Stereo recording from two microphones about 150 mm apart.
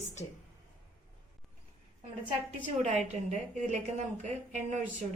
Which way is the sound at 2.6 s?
50° right (ahead or behind).